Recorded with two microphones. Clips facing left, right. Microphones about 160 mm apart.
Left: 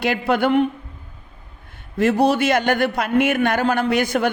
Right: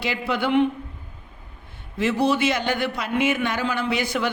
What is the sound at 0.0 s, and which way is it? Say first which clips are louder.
Speech: left 6 dB; 50° left (ahead or behind).